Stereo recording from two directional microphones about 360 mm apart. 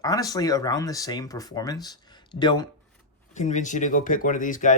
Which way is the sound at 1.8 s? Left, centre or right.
Centre.